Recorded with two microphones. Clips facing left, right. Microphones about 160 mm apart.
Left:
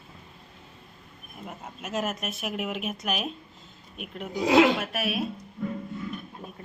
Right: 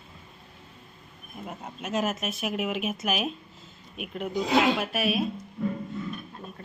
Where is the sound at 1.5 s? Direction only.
Centre (ahead or behind).